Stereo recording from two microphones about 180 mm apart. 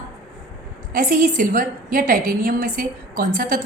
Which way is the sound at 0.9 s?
50° right (ahead or behind).